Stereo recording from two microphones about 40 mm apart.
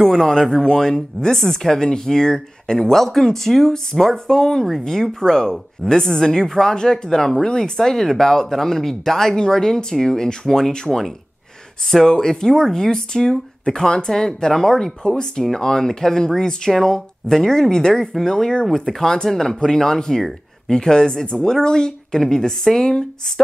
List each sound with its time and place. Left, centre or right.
0.0 s speech: centre
18.7 s speech: centre